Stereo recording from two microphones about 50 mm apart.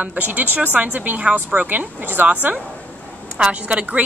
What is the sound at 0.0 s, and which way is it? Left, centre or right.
A woman's voice, right.